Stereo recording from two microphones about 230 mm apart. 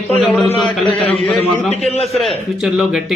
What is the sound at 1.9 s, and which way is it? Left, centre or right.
Speech, left.